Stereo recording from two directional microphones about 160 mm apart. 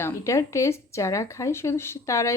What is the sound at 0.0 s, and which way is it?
Speech, 20° left (ahead or behind).